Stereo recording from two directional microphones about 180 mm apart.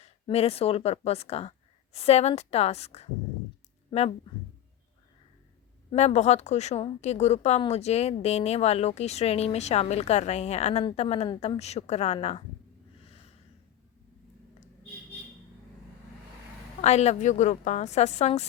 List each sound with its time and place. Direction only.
0.0 s speech: 35° left (ahead or behind)
5.9 s a woman's voice: 35° left (ahead or behind)
16.8 s a woman's voice: 40° left (ahead or behind)